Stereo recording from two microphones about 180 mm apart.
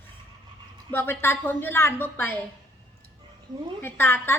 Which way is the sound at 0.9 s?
10° left (ahead or behind).